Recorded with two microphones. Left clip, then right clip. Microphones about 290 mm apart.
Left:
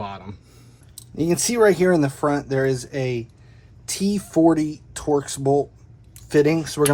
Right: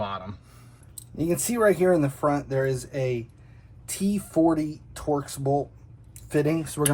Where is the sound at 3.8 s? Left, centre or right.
Left.